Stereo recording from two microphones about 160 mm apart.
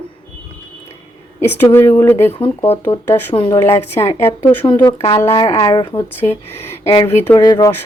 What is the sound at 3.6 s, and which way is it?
Speech, 15° left (ahead or behind).